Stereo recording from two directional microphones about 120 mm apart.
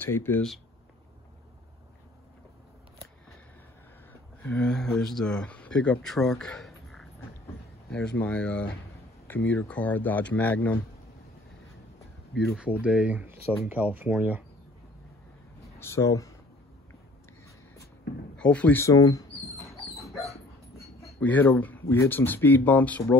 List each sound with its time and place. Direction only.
0.0 s speech: 15° left (ahead or behind)
4.1 s speech: 15° left (ahead or behind)
12.4 s speech: 10° right (ahead or behind)
15.8 s speech: 25° left (ahead or behind)
18.3 s speech: 10° left (ahead or behind)
18.8 s bird: 30° left (ahead or behind)
19.9 s dog: centre (ahead or behind)
21.2 s speech: 15° left (ahead or behind)